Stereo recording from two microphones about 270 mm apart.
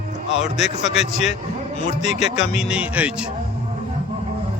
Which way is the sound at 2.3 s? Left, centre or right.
Left.